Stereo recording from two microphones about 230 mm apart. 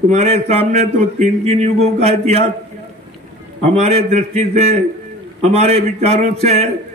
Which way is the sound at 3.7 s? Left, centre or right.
Right.